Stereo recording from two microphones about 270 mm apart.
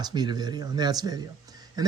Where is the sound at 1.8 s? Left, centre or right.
Centre.